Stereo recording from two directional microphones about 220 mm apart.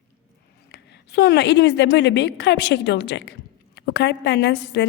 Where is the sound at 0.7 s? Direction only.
50° left (ahead or behind).